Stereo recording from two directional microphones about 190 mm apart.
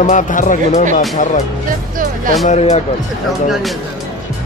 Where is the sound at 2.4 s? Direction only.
35° left (ahead or behind).